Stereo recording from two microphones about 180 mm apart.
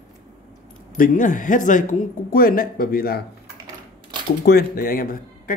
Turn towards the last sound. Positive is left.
turn(degrees=50)  # may be behind; listen again after turning